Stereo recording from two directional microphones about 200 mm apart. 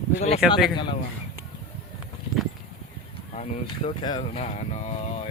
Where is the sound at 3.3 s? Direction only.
35° left (ahead or behind).